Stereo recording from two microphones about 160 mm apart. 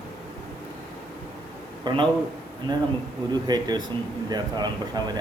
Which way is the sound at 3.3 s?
25° right (ahead or behind).